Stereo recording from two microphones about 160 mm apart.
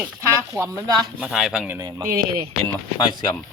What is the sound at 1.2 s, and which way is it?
Speech, 5° right (ahead or behind).